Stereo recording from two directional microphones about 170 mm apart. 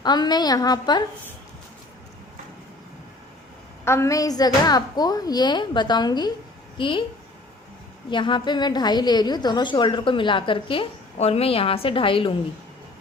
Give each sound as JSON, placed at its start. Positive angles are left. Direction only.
{"t": 0.0, "sound": "a woman's voice", "side_deg": 25}
{"t": 3.8, "sound": "a woman's voice", "side_deg": 15}
{"t": 8.1, "sound": "a woman's voice", "side_deg": 25}